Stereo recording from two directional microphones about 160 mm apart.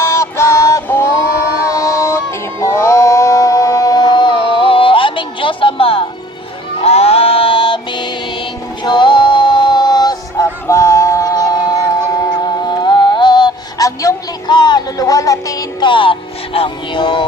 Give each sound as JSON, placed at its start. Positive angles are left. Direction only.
{"t": 0.0, "sound": "music", "side_deg": 15}
{"t": 1.6, "sound": "a sound", "side_deg": 20}
{"t": 6.7, "sound": "music", "side_deg": 40}